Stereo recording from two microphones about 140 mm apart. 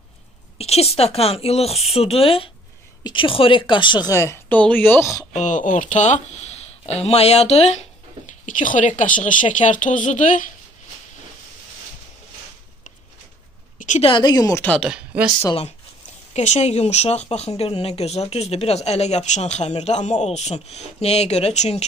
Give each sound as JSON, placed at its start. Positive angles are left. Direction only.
{"t": 0.6, "sound": "a woman's voice", "side_deg": 45}
{"t": 4.1, "sound": "speech", "side_deg": 20}
{"t": 4.6, "sound": "speech", "side_deg": 10}
{"t": 5.3, "sound": "speech", "side_deg": 60}
{"t": 8.5, "sound": "a woman's voice", "side_deg": 65}
{"t": 13.7, "sound": "a sound", "side_deg": 60}
{"t": 14.0, "sound": "speech", "side_deg": 35}
{"t": 14.6, "sound": "speech", "side_deg": 10}
{"t": 14.9, "sound": "speech", "side_deg": -5}
{"t": 16.3, "sound": "speech", "side_deg": 55}